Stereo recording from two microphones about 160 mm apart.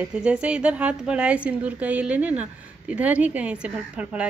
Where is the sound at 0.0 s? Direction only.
5° right (ahead or behind).